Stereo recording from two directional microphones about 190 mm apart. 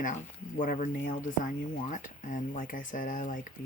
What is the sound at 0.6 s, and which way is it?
Speech, 40° left (ahead or behind).